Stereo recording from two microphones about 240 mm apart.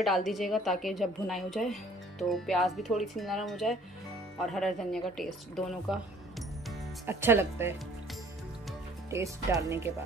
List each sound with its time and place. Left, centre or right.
0.0 s a woman's voice: centre
7.1 s speech: centre
9.1 s speech: centre